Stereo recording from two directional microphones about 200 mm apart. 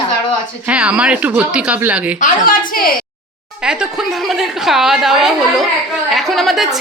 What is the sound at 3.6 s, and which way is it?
A woman's voice, 5° right (ahead or behind).